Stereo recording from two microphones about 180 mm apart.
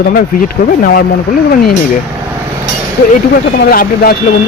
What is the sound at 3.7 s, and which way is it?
Speech, 55° left (ahead or behind).